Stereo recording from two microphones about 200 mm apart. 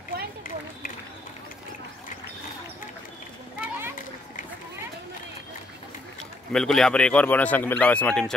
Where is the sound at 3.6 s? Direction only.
10° right (ahead or behind).